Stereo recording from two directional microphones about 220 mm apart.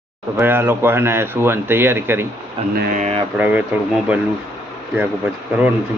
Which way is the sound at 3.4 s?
5° right (ahead or behind).